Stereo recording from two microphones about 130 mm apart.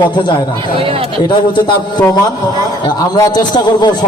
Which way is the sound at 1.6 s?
35° left (ahead or behind).